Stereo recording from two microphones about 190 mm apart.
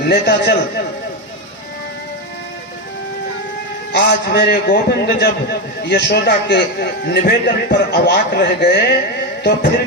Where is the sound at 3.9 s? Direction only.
60° left (ahead or behind).